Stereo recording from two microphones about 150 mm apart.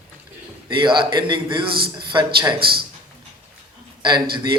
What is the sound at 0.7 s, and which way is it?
A man's voice, 30° right (ahead or behind).